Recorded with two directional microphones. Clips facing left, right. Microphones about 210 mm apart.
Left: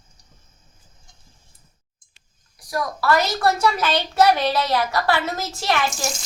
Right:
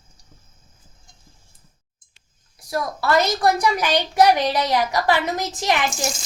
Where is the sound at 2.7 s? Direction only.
25° right (ahead or behind).